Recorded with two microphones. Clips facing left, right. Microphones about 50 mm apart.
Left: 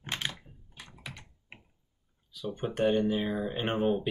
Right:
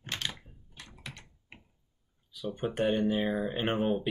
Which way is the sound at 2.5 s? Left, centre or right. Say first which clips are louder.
Left 2 dB; centre.